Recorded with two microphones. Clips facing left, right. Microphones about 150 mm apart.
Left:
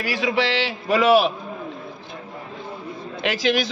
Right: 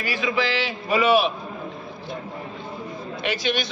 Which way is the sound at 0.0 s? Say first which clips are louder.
Left 2 dB; 85° left.